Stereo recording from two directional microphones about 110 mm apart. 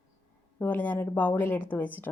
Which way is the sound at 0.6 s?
15° left (ahead or behind).